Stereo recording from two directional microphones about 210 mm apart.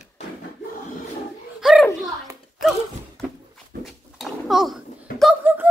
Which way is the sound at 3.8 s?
Centre (ahead or behind).